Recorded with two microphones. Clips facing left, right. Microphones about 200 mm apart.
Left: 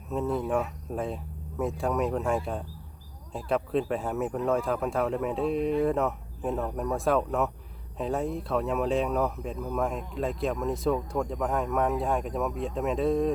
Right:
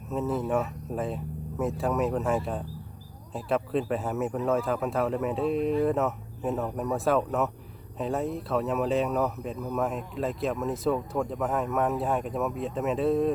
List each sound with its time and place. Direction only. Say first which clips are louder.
0.1 s speech: even; centre (ahead or behind)